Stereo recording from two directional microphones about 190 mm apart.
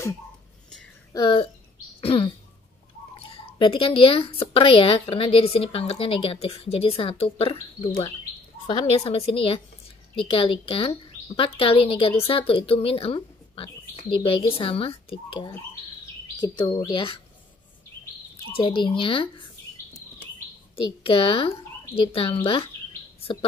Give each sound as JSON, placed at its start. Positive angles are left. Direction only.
{"t": 1.1, "sound": "a woman's voice", "side_deg": 25}
{"t": 2.0, "sound": "a sound", "side_deg": 30}
{"t": 3.2, "sound": "a woman's voice", "side_deg": 30}
{"t": 8.6, "sound": "a woman's voice", "side_deg": 30}
{"t": 18.5, "sound": "a woman's voice", "side_deg": 25}
{"t": 21.0, "sound": "a woman's voice", "side_deg": 30}